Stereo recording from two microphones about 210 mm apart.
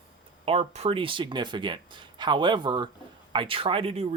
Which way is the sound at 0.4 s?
25° right (ahead or behind).